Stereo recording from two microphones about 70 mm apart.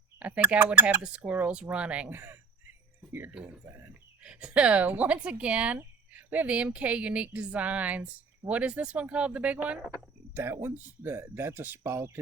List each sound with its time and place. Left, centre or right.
0.2 s speech: right
2.0 s speech: right
3.3 s speech: centre
10.3 s speech: right